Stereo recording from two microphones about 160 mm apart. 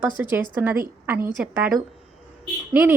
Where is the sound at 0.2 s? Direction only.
10° right (ahead or behind).